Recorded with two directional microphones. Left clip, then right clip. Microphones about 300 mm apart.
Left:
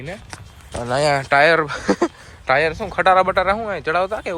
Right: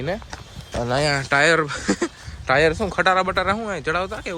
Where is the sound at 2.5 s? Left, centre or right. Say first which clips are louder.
Even; centre.